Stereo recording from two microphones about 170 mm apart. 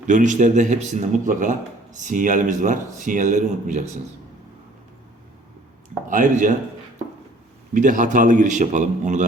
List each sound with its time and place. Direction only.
0.1 s speech: 45° right (ahead or behind)
6.1 s speech: 50° right (ahead or behind)
7.7 s speech: 50° right (ahead or behind)